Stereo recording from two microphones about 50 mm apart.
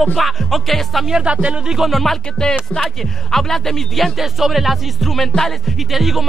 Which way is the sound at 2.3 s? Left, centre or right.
Centre.